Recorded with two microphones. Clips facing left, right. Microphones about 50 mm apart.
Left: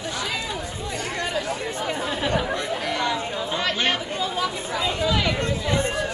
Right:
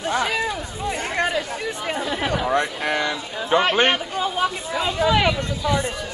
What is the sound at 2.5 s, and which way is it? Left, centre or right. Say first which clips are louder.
Speech: right 4 dB; right.